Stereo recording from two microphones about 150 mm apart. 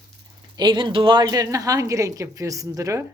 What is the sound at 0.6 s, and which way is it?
A woman's voice, 30° right (ahead or behind).